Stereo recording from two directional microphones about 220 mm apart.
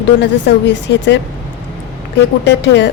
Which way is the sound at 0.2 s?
50° left (ahead or behind).